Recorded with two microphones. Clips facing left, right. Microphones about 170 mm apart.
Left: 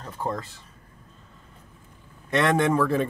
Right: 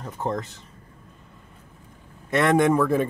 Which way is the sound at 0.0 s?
20° right (ahead or behind).